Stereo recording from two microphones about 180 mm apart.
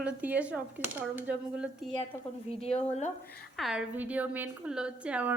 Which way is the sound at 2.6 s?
35° left (ahead or behind).